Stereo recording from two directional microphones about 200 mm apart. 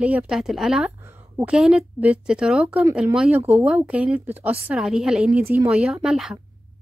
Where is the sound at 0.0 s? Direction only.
5° right (ahead or behind).